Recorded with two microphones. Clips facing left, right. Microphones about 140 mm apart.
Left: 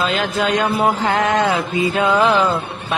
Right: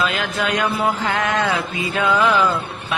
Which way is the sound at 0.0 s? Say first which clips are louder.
Left 3 dB; 30° left (ahead or behind).